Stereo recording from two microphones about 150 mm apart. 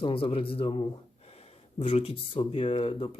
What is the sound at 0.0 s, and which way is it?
Speech, 40° left (ahead or behind).